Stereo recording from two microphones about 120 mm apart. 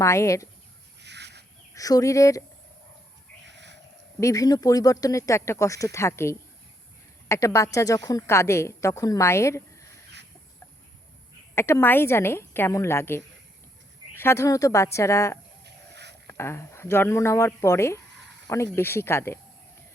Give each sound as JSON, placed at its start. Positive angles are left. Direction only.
{"t": 0.0, "sound": "a woman's voice", "side_deg": 25}
{"t": 1.7, "sound": "a woman's voice", "side_deg": 30}
{"t": 4.2, "sound": "a woman's voice", "side_deg": 25}
{"t": 11.5, "sound": "a woman's voice", "side_deg": 20}